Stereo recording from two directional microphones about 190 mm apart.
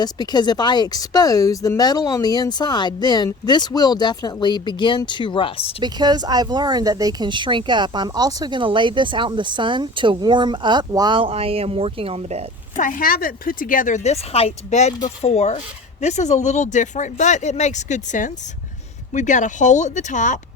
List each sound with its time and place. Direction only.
0.0 s speech: 20° left (ahead or behind)
5.8 s speech: 20° right (ahead or behind)
12.7 s speech: 45° left (ahead or behind)